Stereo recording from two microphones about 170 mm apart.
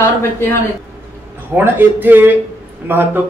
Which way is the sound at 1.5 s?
10° right (ahead or behind).